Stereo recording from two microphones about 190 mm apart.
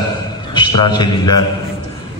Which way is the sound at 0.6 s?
25° left (ahead or behind).